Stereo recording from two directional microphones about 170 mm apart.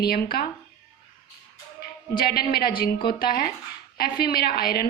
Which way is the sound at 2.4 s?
65° left (ahead or behind).